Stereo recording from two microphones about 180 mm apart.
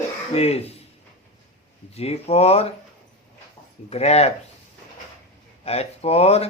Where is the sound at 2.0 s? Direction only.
35° left (ahead or behind).